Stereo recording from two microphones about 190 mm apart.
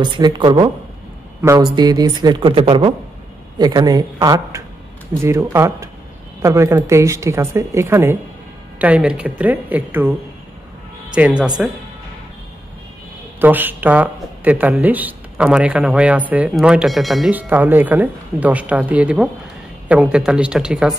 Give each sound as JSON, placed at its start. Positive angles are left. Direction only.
{"t": 0.0, "sound": "speech", "side_deg": -25}
{"t": 11.1, "sound": "speech", "side_deg": -5}
{"t": 13.4, "sound": "speech", "side_deg": -10}